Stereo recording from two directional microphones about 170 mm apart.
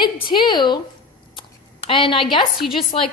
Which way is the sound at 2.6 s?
Centre (ahead or behind).